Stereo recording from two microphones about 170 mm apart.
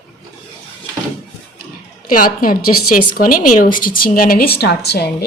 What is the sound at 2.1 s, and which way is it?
A woman's voice, 55° left (ahead or behind).